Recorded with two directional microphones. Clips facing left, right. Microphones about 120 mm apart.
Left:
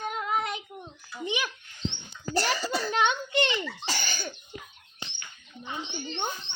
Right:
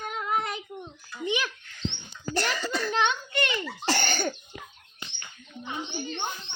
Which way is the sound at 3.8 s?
60° right (ahead or behind).